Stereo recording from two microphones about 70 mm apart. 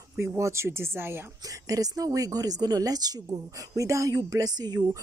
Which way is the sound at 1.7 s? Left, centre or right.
Right.